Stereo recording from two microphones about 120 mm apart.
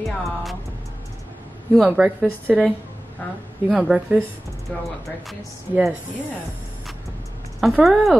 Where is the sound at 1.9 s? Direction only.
10° right (ahead or behind).